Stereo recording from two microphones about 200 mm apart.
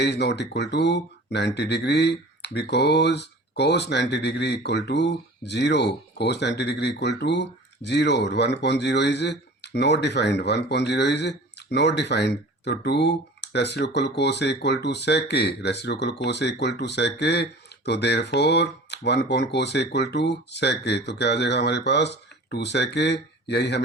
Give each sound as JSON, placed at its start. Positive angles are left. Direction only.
{"t": 0.0, "sound": "speech", "side_deg": 55}